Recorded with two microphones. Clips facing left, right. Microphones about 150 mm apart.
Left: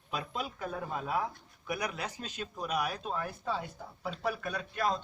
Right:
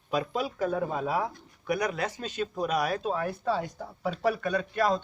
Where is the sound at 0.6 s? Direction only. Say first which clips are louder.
Right 13 dB; 90° right.